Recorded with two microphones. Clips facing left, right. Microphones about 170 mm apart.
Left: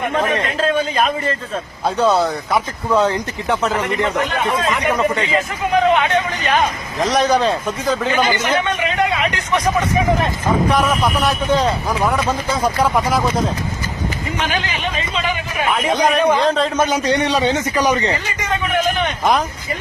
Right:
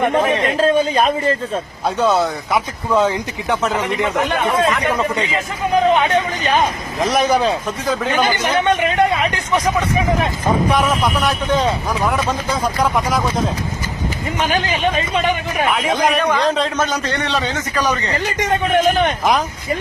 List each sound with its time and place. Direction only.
2.0 s speech: centre (ahead or behind)
7.0 s speech: 5° right (ahead or behind)
10.8 s speech: centre (ahead or behind)
15.7 s speech: centre (ahead or behind)
16.7 s a man's voice: 15° left (ahead or behind)
18.9 s speech: 50° right (ahead or behind)